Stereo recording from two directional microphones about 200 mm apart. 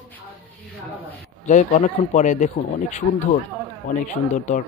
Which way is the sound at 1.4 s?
35° left (ahead or behind).